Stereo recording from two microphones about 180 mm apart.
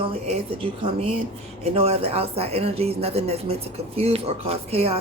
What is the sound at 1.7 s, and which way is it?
Speech, 35° right (ahead or behind).